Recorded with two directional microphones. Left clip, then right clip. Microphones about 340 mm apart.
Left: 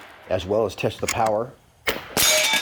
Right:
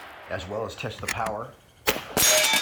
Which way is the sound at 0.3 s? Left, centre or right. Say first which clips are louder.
Left 10 dB; left.